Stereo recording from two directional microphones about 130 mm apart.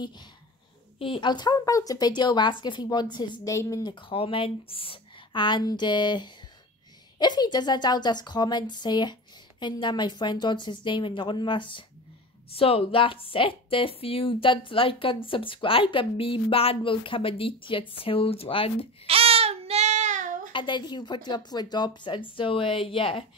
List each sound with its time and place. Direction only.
0.9 s a woman's voice: 45° left (ahead or behind)
3.4 s speech: 25° left (ahead or behind)
3.8 s a woman's voice: 45° left (ahead or behind)
19.0 s child singing: 50° right (ahead or behind); by 20.5 s 80° right
20.5 s a woman's voice: 35° left (ahead or behind)